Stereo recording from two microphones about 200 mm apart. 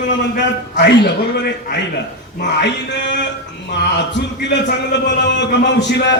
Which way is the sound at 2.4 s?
60° left (ahead or behind).